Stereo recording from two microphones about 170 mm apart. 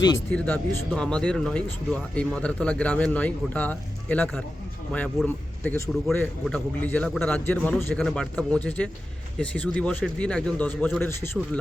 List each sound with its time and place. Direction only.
0.3 s a man's voice: 10° left (ahead or behind)